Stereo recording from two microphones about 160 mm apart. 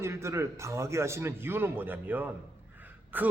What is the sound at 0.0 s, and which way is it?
Speech, 15° right (ahead or behind).